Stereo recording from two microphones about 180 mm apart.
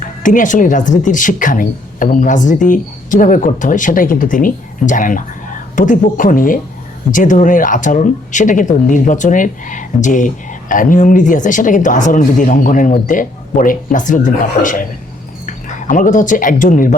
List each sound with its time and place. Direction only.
0.2 s speech: 45° left (ahead or behind)